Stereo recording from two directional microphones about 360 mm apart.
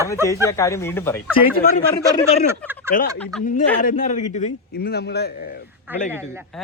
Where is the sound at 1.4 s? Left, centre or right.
Left.